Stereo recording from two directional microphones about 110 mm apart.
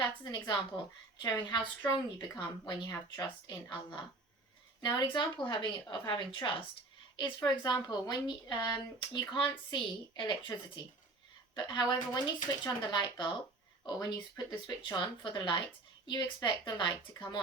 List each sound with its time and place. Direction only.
0.0 s a woman's voice: 45° left (ahead or behind)